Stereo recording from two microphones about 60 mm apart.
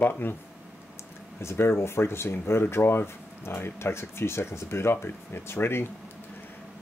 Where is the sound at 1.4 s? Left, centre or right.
Left.